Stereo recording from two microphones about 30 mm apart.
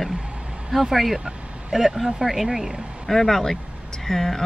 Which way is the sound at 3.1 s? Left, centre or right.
Centre.